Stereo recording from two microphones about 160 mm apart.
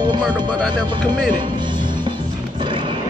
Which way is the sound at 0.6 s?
5° left (ahead or behind).